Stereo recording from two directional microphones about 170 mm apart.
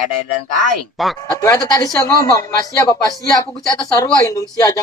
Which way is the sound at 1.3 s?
20° left (ahead or behind).